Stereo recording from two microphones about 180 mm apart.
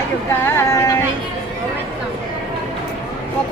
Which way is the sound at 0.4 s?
15° left (ahead or behind).